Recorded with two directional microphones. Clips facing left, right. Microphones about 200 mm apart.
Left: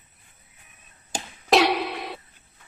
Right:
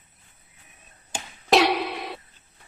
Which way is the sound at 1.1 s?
40° left (ahead or behind).